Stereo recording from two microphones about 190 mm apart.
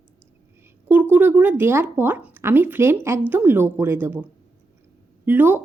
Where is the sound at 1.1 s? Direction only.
10° right (ahead or behind).